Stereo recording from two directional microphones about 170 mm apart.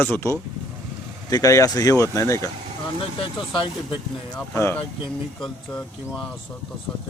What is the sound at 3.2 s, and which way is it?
Speech, 30° left (ahead or behind).